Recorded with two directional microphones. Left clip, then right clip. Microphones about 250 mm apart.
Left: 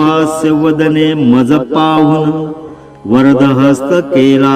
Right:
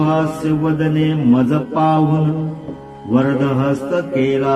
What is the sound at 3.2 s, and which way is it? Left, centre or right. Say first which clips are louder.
Mantra: left 9 dB; left.